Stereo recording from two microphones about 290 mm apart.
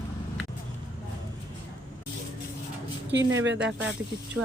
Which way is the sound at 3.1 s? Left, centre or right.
Right.